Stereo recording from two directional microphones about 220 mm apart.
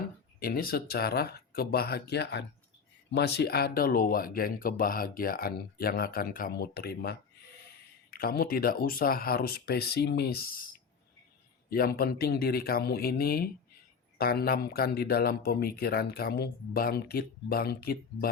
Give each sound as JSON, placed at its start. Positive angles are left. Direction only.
{"t": 0.3, "sound": "speech", "side_deg": 40}